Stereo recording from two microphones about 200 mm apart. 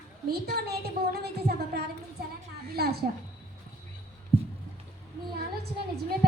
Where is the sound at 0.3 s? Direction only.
50° right (ahead or behind).